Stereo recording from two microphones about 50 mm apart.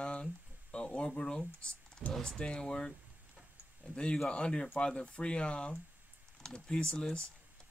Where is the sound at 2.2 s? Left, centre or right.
Centre.